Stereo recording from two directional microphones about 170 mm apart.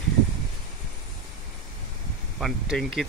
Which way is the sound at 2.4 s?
Centre (ahead or behind).